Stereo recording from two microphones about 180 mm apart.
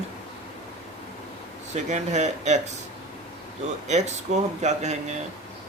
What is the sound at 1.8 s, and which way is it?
Speech, 40° right (ahead or behind).